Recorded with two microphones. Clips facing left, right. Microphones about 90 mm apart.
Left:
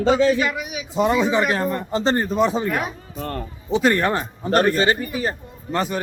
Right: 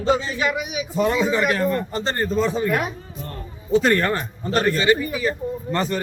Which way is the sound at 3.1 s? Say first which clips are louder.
Left 6 dB; 70° left (ahead or behind).